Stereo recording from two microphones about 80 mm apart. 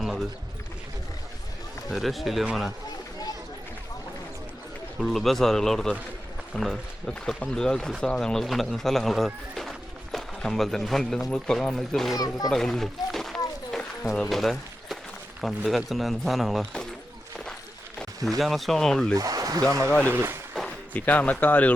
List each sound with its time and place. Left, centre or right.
1.9 s speech: centre
4.9 s a man's voice: centre
12.1 s speech: left
12.5 s speech: centre
13.7 s run: centre
14.2 s speech: centre
18.3 s speech: centre
19.1 s speech: right
19.9 s speech: left
20.1 s a sound: right
20.9 s speech: centre